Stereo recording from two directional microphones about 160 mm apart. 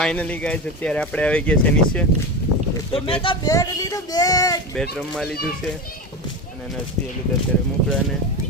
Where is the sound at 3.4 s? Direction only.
20° left (ahead or behind).